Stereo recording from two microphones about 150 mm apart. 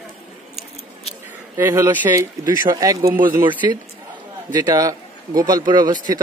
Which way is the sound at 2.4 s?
25° right (ahead or behind).